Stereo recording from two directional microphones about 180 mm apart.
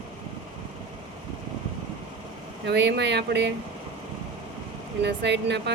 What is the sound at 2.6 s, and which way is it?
Speech, 70° right (ahead or behind).